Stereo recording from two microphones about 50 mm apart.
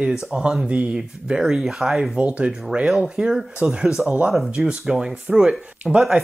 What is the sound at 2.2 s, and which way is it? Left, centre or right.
Speech, right.